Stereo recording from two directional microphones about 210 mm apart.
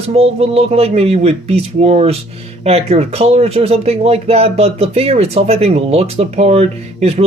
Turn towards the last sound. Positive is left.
turn(degrees=-30)  # may be behind; listen again after turning